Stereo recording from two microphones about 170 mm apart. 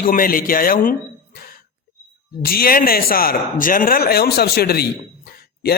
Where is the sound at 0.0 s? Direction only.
55° left (ahead or behind).